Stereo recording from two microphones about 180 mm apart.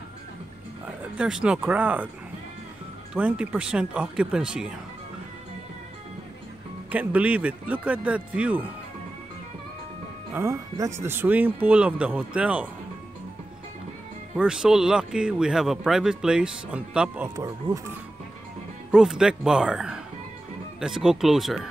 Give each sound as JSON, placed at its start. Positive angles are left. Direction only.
{"t": 1.1, "sound": "speech", "side_deg": -5}
{"t": 3.2, "sound": "speech", "side_deg": -5}
{"t": 6.9, "sound": "speech", "side_deg": -10}
{"t": 10.3, "sound": "speech", "side_deg": -15}
{"t": 14.3, "sound": "speech", "side_deg": -5}
{"t": 17.4, "sound": "speech", "side_deg": -20}
{"t": 18.9, "sound": "speech", "side_deg": -5}